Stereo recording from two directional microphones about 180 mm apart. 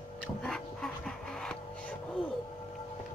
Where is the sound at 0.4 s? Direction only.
5° left (ahead or behind).